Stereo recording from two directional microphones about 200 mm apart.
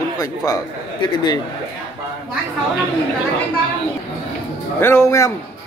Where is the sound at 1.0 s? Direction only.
20° left (ahead or behind).